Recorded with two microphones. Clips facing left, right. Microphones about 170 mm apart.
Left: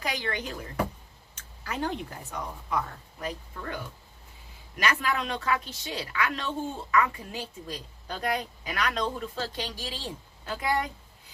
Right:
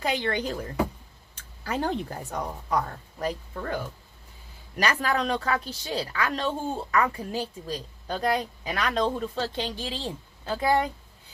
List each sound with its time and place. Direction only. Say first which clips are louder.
0.0 s speech: right 5 dB; 30° right (ahead or behind)
4.8 s a woman's voice: right 3 dB; 35° right (ahead or behind)